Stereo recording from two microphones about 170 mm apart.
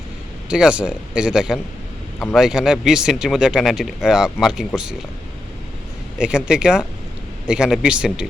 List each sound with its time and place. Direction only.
0.5 s speech: 5° right (ahead or behind)
6.1 s speech: 5° right (ahead or behind)